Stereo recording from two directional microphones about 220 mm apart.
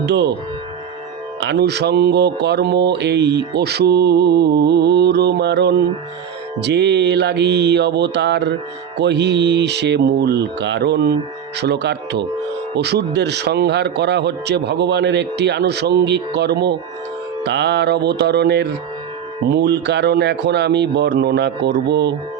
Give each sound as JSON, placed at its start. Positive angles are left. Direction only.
{"t": 0.0, "sound": "a man's voice", "side_deg": -50}
{"t": 1.4, "sound": "a man's voice", "side_deg": -50}